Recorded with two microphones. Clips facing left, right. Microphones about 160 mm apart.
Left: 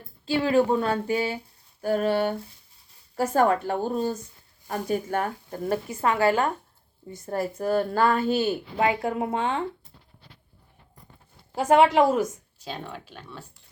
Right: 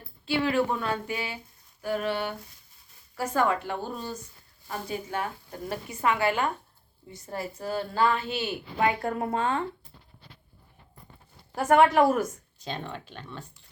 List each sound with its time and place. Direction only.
0.3 s a woman's voice: 35° left (ahead or behind)
7.3 s a woman's voice: 50° left (ahead or behind)
8.8 s speech: 20° left (ahead or behind)
11.5 s speech: 15° left (ahead or behind)
12.6 s speech: 5° left (ahead or behind)